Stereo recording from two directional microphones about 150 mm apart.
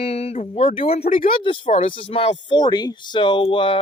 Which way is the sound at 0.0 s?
40° left (ahead or behind).